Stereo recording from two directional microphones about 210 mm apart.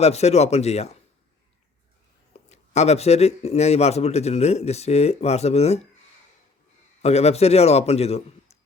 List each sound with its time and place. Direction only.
0.0 s speech: 30° left (ahead or behind)
2.3 s speech: 30° left (ahead or behind)
7.0 s speech: 30° left (ahead or behind)